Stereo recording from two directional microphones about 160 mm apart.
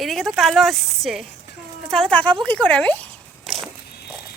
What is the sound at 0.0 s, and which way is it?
Speech, centre (ahead or behind).